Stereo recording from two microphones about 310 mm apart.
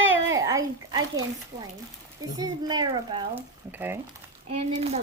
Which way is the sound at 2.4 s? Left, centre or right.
Centre.